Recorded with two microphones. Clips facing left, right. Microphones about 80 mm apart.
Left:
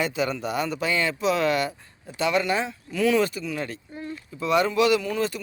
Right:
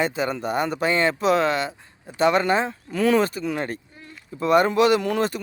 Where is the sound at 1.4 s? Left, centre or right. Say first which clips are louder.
Right 1 dB; right.